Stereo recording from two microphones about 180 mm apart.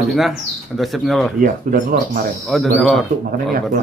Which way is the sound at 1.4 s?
50° right (ahead or behind).